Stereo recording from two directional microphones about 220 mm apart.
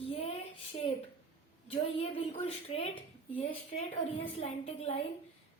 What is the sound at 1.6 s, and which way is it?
A woman's voice, 25° left (ahead or behind).